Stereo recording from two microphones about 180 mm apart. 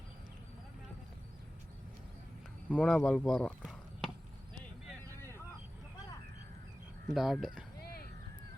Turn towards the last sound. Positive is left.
turn(degrees=0)  # may be behind; listen again after turning